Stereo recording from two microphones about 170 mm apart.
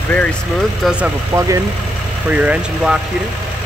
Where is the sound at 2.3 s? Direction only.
10° right (ahead or behind).